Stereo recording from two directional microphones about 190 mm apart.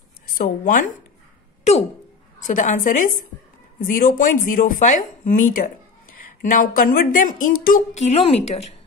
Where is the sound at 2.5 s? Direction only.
45° left (ahead or behind).